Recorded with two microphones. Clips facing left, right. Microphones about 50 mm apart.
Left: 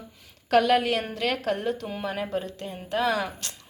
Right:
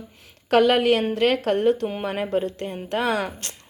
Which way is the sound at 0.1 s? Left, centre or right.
Right.